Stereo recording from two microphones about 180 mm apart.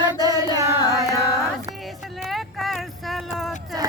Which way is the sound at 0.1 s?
20° right (ahead or behind).